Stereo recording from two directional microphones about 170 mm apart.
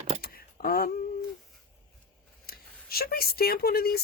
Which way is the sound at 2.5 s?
65° left (ahead or behind).